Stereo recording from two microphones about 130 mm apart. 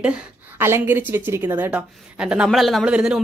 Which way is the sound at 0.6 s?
20° right (ahead or behind).